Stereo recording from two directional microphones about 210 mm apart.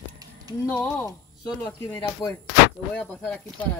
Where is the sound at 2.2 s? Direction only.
20° left (ahead or behind).